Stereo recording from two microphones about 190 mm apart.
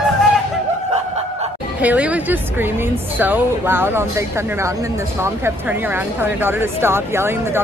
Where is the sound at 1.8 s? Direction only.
5° right (ahead or behind).